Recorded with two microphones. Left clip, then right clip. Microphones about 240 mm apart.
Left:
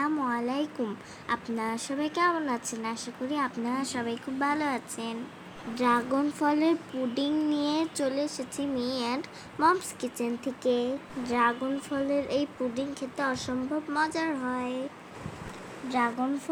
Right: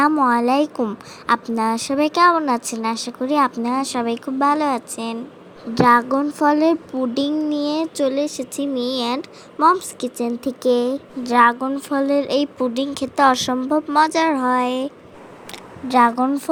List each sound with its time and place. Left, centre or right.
0.0 s speech: right
15.9 s speech: right